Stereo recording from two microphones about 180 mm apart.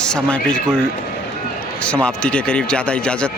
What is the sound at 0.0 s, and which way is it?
Speech, 5° left (ahead or behind).